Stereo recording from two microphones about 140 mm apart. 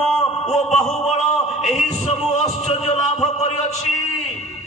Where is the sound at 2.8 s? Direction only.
50° left (ahead or behind).